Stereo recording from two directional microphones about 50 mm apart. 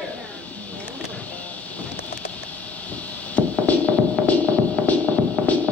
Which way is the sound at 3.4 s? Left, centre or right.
Left.